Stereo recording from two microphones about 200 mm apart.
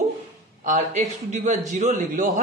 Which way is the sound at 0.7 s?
40° right (ahead or behind).